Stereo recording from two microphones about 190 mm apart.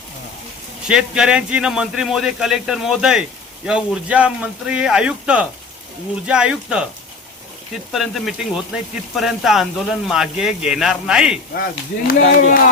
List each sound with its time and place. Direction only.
0.9 s speech: 5° right (ahead or behind)
11.5 s speech: 55° left (ahead or behind)